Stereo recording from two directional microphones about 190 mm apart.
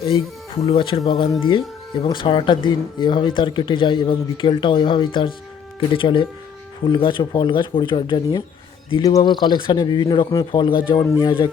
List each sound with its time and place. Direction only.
0.0 s a man's voice: 30° left (ahead or behind)